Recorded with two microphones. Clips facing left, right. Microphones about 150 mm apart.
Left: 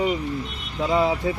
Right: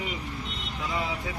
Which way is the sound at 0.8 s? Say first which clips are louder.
Left 11 dB; 85° left.